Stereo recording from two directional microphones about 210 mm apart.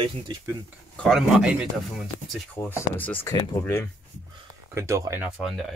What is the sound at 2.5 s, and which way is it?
Speech, 10° left (ahead or behind).